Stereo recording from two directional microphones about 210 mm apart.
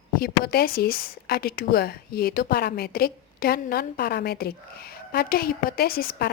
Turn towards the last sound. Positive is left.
turn(degrees=45)  # may be behind; listen again after turning